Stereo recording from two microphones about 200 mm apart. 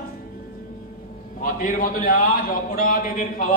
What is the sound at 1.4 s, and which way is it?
A man's voice, 45° left (ahead or behind).